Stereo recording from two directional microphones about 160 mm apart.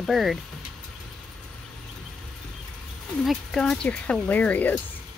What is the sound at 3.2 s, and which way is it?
Speech, centre (ahead or behind).